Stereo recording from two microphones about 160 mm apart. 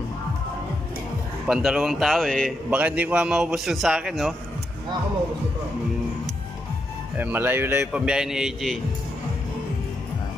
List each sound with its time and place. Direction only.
1.5 s a man's voice: centre (ahead or behind)
2.7 s a man's voice: 10° right (ahead or behind)
7.2 s a man's voice: 10° right (ahead or behind)